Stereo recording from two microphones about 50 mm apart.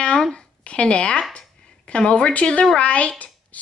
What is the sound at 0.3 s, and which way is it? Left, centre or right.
A woman's voice, left.